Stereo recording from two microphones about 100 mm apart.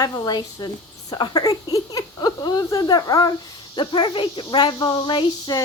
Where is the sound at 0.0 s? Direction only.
40° left (ahead or behind).